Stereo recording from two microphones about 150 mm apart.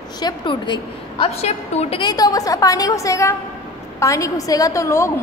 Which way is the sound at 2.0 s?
25° left (ahead or behind).